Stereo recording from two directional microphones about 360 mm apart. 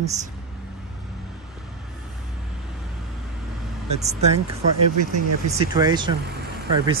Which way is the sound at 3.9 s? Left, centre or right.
Centre.